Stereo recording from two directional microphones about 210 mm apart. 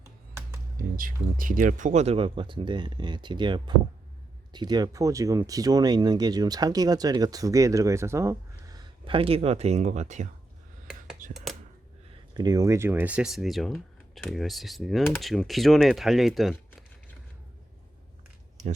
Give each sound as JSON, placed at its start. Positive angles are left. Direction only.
{"t": 0.9, "sound": "speech", "side_deg": -40}
{"t": 11.2, "sound": "a sound", "side_deg": -40}
{"t": 12.4, "sound": "speech", "side_deg": -15}